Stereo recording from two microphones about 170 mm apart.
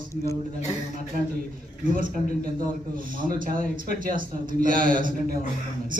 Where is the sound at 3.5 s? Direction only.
45° left (ahead or behind).